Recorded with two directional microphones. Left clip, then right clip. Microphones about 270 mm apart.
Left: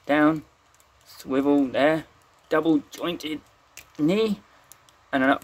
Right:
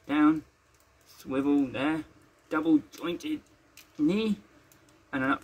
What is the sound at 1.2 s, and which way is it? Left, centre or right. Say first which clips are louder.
Speech: left 6 dB; left.